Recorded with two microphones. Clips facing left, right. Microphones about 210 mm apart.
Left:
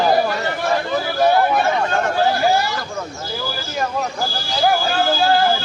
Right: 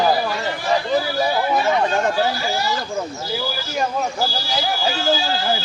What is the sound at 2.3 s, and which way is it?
Speech, 55° left (ahead or behind).